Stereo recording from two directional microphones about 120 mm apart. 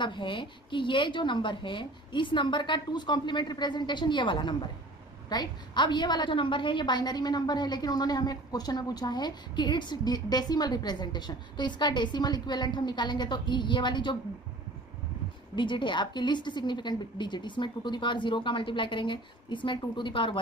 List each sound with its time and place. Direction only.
0.0 s a woman's voice: 40° left (ahead or behind)
15.5 s a woman's voice: 45° left (ahead or behind)